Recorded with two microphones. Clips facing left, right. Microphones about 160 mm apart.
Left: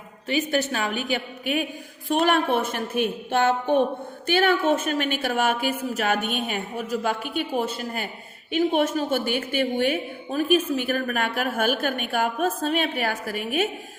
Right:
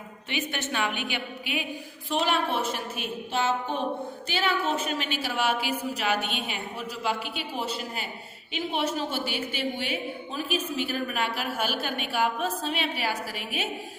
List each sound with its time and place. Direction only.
0.3 s a woman's voice: 40° left (ahead or behind)